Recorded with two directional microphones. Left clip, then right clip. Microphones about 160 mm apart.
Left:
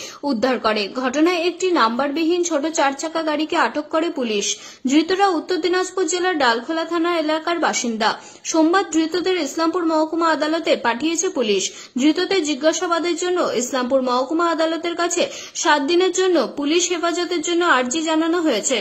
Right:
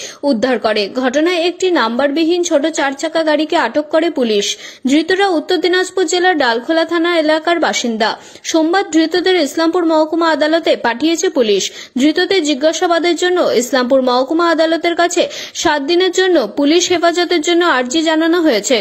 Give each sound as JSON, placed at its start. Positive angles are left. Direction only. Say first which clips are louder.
{"t": 0.2, "sound": "a woman's voice", "louder": "right 5 dB", "side_deg": -15}